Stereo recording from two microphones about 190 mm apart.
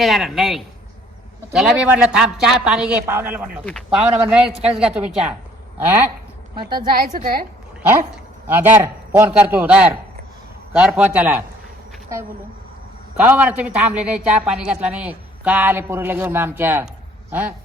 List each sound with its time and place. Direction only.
0.0 s speech: centre (ahead or behind)
3.7 s speech: 5° left (ahead or behind)
6.6 s a woman's voice: 25° right (ahead or behind)
6.9 s a woman's voice: 50° right (ahead or behind)
8.4 s a woman's voice: 10° right (ahead or behind)
13.1 s a woman's voice: 5° right (ahead or behind)